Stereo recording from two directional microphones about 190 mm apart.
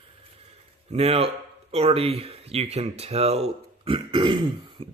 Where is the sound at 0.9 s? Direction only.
30° right (ahead or behind).